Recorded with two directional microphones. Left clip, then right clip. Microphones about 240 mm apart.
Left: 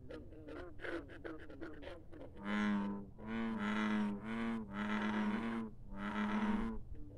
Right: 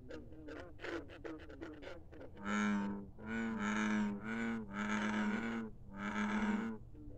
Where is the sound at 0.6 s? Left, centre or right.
Right.